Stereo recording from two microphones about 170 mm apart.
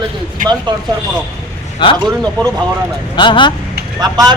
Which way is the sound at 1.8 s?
30° left (ahead or behind).